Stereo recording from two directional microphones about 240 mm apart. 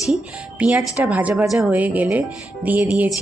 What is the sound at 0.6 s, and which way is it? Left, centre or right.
Speech, centre.